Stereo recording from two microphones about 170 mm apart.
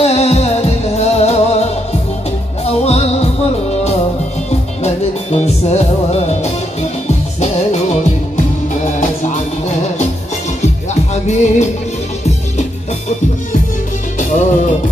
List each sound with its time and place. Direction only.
0.0 s music: 40° left (ahead or behind)
4.5 s music: 40° left (ahead or behind)
11.2 s music: 45° left (ahead or behind)
14.3 s music: 45° left (ahead or behind)